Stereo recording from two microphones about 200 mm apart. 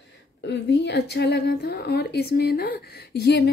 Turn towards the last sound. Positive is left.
turn(degrees=55)  # may be behind; listen again after turning